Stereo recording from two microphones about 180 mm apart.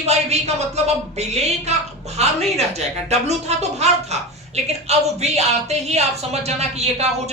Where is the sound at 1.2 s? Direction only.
35° right (ahead or behind).